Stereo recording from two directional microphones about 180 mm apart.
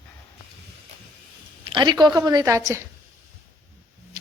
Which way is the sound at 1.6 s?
25° right (ahead or behind).